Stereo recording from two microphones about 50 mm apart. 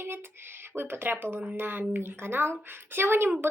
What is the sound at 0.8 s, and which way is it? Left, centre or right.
Speech, right.